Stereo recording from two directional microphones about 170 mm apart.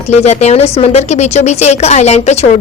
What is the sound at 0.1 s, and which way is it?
A woman's voice, 40° left (ahead or behind).